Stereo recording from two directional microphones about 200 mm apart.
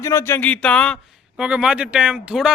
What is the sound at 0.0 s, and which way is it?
Speech, 15° left (ahead or behind).